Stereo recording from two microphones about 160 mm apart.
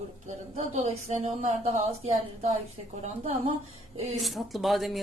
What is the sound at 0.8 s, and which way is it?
A woman's voice, 45° right (ahead or behind).